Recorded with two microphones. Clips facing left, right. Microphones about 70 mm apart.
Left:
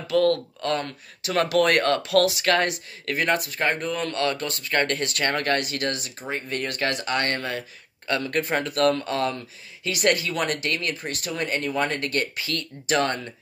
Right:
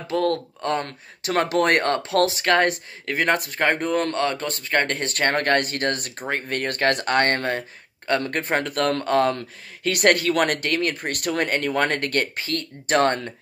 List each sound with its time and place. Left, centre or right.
0.0 s speech: right
0.8 s speech: right
4.2 s speech: right